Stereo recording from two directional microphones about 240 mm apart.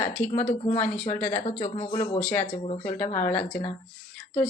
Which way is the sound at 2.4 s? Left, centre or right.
Left.